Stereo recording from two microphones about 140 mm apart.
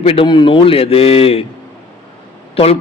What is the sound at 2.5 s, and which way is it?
Speech, 45° left (ahead or behind).